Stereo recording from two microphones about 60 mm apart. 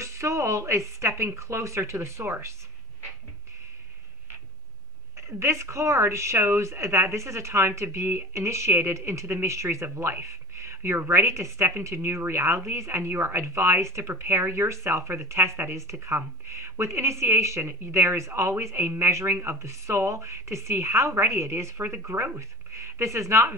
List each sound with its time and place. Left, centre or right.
0.0 s speech: right
5.4 s speech: right